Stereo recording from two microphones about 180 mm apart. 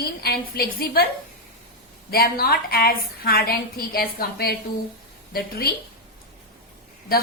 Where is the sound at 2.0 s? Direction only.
55° left (ahead or behind).